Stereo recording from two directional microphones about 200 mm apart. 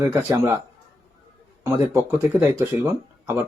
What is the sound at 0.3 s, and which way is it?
Speech, 15° right (ahead or behind).